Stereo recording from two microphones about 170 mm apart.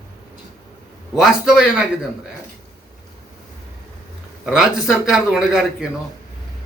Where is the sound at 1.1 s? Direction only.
Centre (ahead or behind).